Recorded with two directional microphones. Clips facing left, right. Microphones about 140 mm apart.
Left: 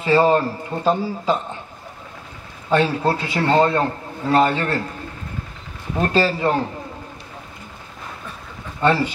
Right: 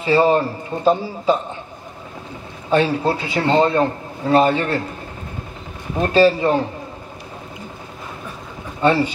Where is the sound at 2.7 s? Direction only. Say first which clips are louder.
Right 1 dB; 20° right (ahead or behind).